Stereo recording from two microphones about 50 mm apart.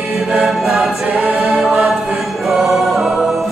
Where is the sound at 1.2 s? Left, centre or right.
Right.